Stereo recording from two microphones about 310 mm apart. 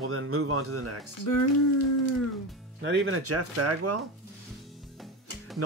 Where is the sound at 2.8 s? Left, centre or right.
Right.